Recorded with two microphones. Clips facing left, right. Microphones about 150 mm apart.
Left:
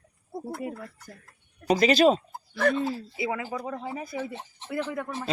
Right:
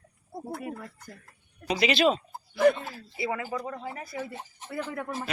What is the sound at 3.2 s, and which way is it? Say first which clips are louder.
Speech: right 4 dB; 10° left (ahead or behind).